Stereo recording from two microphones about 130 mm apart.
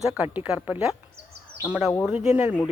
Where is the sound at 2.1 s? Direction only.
10° right (ahead or behind).